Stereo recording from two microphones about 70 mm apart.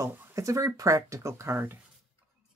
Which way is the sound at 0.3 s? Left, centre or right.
Right.